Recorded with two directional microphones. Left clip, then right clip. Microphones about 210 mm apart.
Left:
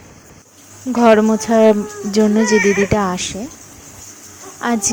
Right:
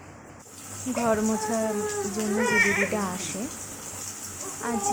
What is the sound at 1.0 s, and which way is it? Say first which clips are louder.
Speech: left 14 dB; 40° left (ahead or behind).